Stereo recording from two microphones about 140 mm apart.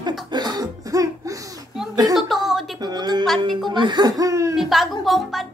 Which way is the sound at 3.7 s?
35° right (ahead or behind).